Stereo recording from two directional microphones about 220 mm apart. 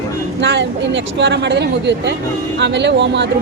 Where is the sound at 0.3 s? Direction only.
55° right (ahead or behind).